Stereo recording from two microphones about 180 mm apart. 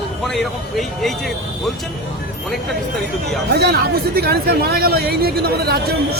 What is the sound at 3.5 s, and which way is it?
Speech, 65° right (ahead or behind).